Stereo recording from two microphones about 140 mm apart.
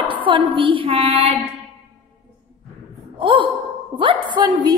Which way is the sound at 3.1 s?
40° right (ahead or behind).